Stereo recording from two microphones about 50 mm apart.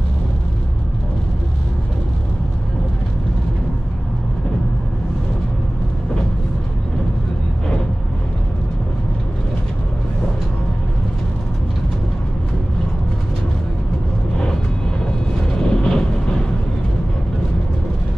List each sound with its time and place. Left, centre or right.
15.0 s music: centre